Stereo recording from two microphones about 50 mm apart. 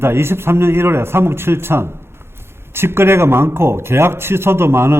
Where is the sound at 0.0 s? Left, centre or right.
Right.